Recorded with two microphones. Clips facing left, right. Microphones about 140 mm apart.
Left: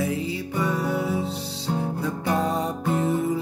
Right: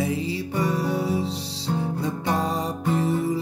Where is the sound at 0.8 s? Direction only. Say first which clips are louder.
Even; 30° right (ahead or behind).